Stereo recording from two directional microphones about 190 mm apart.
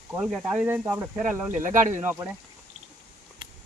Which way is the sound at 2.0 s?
10° right (ahead or behind).